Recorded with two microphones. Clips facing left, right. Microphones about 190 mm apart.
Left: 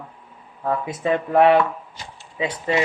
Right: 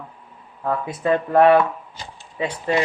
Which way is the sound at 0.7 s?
20° left (ahead or behind).